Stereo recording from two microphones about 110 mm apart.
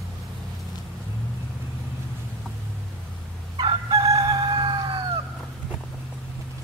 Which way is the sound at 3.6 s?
45° right (ahead or behind).